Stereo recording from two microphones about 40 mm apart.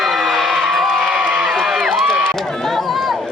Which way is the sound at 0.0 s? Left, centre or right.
Centre.